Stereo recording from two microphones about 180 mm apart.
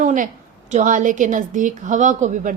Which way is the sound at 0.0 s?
45° right (ahead or behind).